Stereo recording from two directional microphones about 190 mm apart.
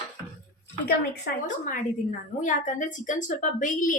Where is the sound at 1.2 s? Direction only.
45° left (ahead or behind).